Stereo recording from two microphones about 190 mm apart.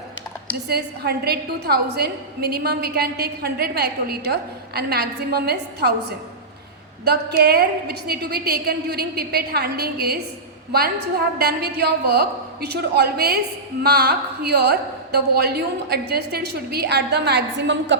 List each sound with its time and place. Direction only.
0.7 s a woman's voice: 55° right (ahead or behind)